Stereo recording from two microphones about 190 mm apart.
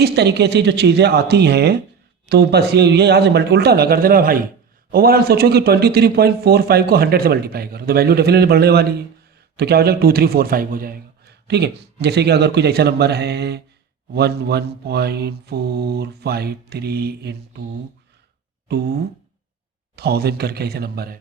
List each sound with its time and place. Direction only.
0.0 s a man's voice: 60° right (ahead or behind)
20.0 s a man's voice: 55° right (ahead or behind)